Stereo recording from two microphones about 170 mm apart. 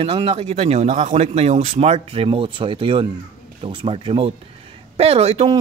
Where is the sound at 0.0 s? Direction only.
35° right (ahead or behind).